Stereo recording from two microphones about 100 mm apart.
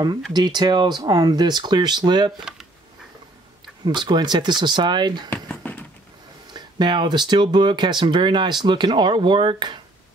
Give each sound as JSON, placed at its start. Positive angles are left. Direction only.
{"t": 0.3, "sound": "speech", "side_deg": -45}
{"t": 3.8, "sound": "speech", "side_deg": -50}
{"t": 5.3, "sound": "a sound", "side_deg": 15}
{"t": 6.5, "sound": "speech", "side_deg": -50}